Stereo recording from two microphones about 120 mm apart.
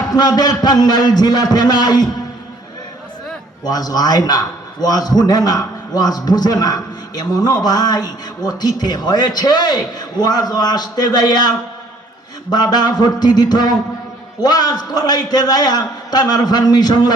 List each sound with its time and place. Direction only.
0.1 s a man's voice: 35° left (ahead or behind)
3.6 s a man's voice: 35° left (ahead or behind)
12.5 s a man's voice: 35° left (ahead or behind)